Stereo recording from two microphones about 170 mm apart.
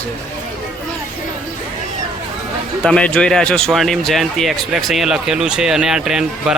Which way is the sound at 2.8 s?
5° left (ahead or behind).